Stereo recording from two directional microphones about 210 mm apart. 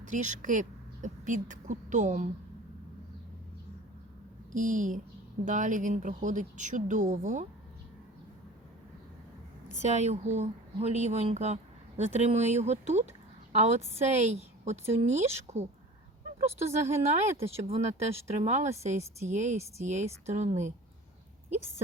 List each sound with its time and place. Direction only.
0.0 s speech: 35° right (ahead or behind)
4.5 s speech: 35° right (ahead or behind)
9.8 s speech: 35° right (ahead or behind)